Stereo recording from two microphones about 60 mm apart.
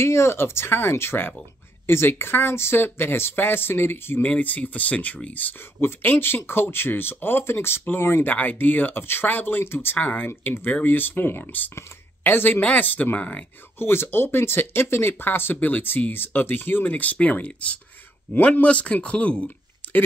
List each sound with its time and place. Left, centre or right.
0.0 s speech: left
4.3 s speech: left
5.8 s speech: left
9.9 s speech: left
13.7 s speech: left